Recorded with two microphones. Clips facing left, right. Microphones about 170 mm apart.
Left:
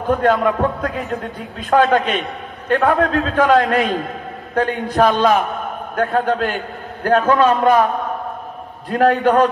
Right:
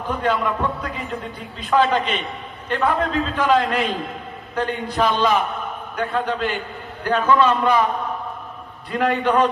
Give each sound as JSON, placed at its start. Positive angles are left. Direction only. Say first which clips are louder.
{"t": 0.1, "sound": "a man's voice", "louder": "left 6 dB", "side_deg": 50}
{"t": 8.9, "sound": "a man's voice", "louder": "left 5 dB", "side_deg": 45}